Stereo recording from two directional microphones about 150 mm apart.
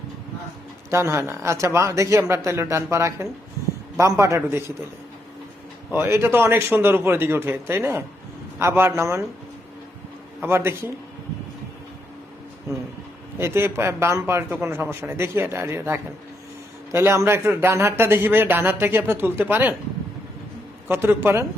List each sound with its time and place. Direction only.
0.9 s speech: 20° right (ahead or behind)
5.9 s a man's voice: 15° right (ahead or behind)
10.4 s a man's voice: 15° right (ahead or behind)
13.4 s a man's voice: 15° right (ahead or behind)
20.8 s a man's voice: 15° right (ahead or behind)